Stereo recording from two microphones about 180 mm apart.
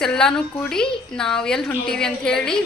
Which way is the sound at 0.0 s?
5° left (ahead or behind).